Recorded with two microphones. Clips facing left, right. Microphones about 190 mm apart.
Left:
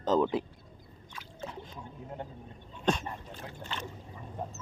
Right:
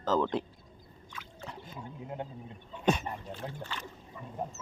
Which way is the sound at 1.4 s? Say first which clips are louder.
Even; 5° right (ahead or behind).